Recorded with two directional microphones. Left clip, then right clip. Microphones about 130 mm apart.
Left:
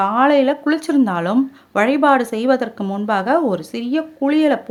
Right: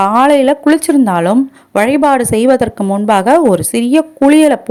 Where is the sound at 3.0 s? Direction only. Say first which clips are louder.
Right 8 dB; 50° right (ahead or behind).